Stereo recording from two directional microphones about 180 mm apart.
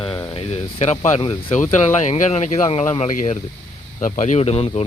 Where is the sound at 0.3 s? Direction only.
30° left (ahead or behind).